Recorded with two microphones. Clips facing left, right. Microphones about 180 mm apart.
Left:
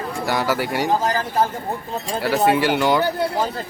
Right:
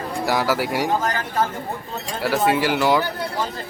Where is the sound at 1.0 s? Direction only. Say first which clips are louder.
Left 2 dB; 35° left (ahead or behind).